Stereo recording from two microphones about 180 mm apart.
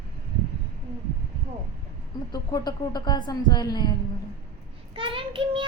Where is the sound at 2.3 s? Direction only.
20° left (ahead or behind).